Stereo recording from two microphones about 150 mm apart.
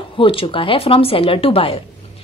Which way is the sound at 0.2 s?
35° left (ahead or behind).